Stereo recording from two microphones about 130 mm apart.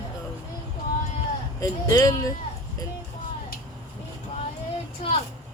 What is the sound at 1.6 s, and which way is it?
Speech, 30° left (ahead or behind).